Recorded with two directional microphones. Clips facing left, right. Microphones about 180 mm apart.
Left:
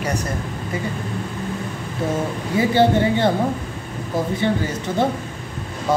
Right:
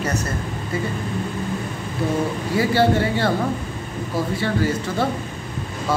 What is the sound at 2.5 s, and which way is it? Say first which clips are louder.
A woman's voice: left 2 dB; 20° left (ahead or behind).